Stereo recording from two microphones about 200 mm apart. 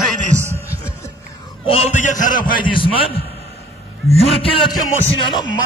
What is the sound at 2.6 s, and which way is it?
Speech, 25° left (ahead or behind).